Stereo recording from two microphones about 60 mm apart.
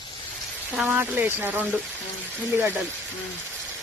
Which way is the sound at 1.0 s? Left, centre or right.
Right.